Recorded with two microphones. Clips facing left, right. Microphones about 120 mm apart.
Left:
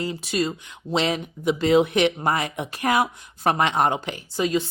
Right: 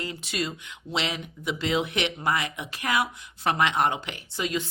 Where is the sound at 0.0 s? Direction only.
35° left (ahead or behind).